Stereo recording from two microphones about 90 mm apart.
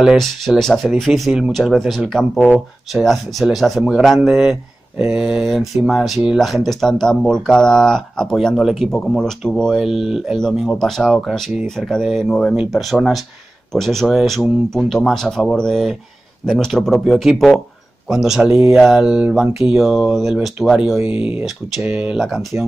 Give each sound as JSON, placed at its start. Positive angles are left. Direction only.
{"t": 0.0, "sound": "speech", "side_deg": -5}
{"t": 9.8, "sound": "speech", "side_deg": -5}
{"t": 21.1, "sound": "speech", "side_deg": 90}
{"t": 21.8, "sound": "speech", "side_deg": -10}